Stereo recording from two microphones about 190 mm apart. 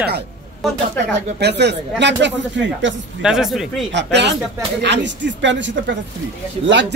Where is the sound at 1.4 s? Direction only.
65° right (ahead or behind).